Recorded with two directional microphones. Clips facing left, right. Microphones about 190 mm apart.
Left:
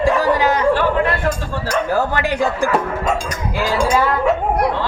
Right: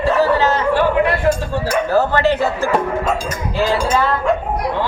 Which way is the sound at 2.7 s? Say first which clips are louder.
Right 1 dB; centre (ahead or behind).